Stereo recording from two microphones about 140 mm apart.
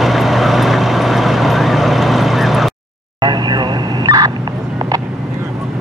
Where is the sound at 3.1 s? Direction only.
30° right (ahead or behind).